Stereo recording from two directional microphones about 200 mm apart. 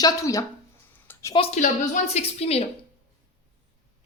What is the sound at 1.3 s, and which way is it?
A woman's voice, 30° left (ahead or behind).